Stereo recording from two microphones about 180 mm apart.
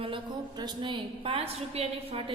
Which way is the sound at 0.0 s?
25° right (ahead or behind).